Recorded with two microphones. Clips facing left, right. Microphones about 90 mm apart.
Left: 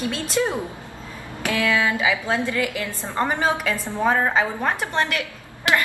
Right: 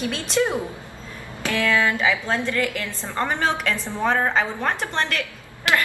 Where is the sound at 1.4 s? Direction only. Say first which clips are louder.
Even; 15° left (ahead or behind).